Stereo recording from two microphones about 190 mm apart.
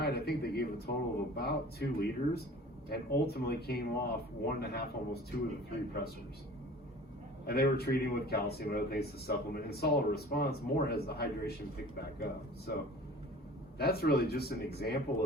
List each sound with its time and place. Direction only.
0.0 s a man's voice: 55° left (ahead or behind)
7.4 s a man's voice: 55° left (ahead or behind)
13.7 s a man's voice: 55° left (ahead or behind)